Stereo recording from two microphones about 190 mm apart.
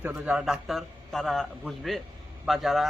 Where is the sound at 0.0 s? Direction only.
5° right (ahead or behind).